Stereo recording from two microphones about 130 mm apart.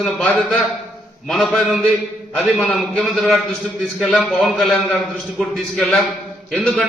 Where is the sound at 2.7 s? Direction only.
Centre (ahead or behind).